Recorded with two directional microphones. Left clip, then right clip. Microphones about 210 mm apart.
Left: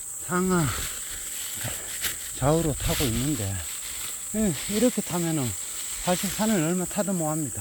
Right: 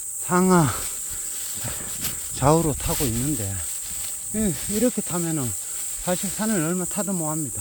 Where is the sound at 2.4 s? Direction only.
30° right (ahead or behind).